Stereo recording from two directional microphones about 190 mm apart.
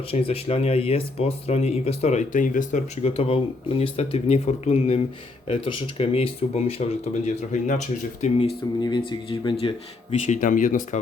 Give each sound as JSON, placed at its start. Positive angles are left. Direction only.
{"t": 0.1, "sound": "speech", "side_deg": 30}
{"t": 8.8, "sound": "speech", "side_deg": 25}